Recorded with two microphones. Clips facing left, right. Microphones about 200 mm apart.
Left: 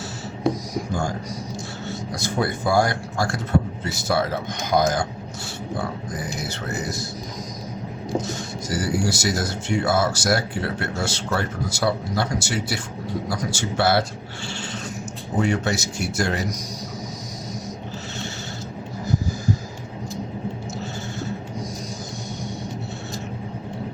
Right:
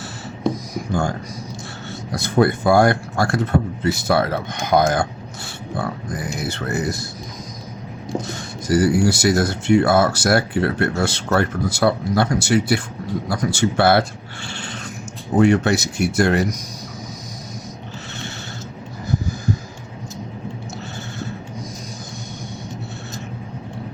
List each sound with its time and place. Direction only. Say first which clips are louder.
2.1 s speech: right 8 dB; 60° right (ahead or behind)
6.4 s speech: right 5 dB; 55° right (ahead or behind)
8.2 s speech: left 1 dB; 60° right (ahead or behind)
14.4 s a sound: even; 60° right (ahead or behind)
15.4 s speech: right 7 dB; 60° right (ahead or behind)